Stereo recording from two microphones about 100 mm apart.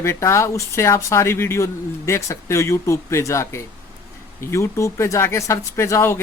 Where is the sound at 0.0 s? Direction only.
30° left (ahead or behind).